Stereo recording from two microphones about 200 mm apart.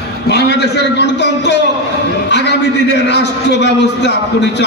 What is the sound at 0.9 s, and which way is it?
Speech, 60° left (ahead or behind).